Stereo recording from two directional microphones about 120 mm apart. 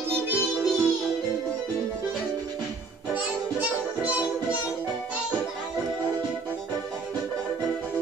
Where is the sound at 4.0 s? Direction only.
10° right (ahead or behind).